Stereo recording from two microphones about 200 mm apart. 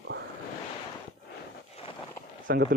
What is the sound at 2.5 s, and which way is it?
Speech, 50° right (ahead or behind).